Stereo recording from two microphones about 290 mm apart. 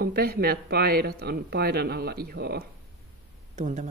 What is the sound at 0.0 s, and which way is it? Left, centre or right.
A man's voice, right.